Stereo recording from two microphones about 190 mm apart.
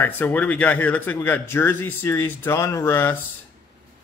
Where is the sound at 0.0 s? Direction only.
10° left (ahead or behind).